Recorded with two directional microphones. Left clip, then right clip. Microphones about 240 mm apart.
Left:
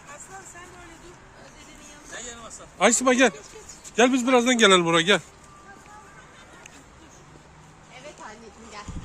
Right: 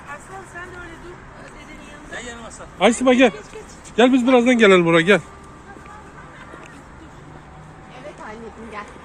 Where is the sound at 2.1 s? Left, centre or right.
Left.